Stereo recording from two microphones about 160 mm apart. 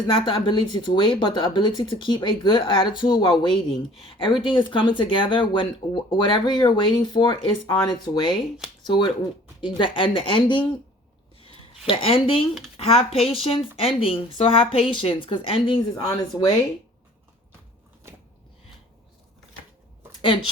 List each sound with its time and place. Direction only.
0.1 s speech: 35° left (ahead or behind)
11.9 s speech: 35° left (ahead or behind)